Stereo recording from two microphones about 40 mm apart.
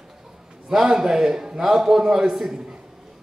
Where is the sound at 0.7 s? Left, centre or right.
Centre.